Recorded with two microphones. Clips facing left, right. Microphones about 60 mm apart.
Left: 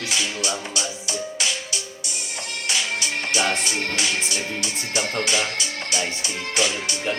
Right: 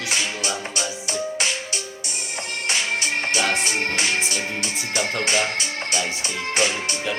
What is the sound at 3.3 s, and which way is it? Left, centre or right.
Speech, right.